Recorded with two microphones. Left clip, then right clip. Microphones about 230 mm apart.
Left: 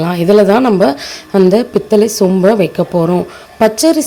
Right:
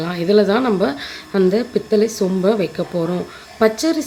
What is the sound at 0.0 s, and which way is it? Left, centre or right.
A woman's voice, left.